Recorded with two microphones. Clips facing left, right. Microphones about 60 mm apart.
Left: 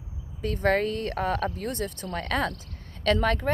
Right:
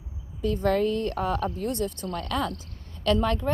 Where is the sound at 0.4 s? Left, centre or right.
Left.